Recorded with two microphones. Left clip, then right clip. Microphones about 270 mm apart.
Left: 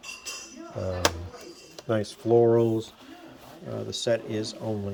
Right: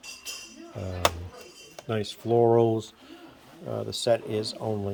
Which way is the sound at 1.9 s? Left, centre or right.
Centre.